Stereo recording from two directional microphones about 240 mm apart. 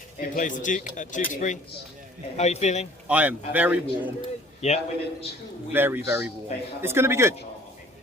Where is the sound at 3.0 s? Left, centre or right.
Centre.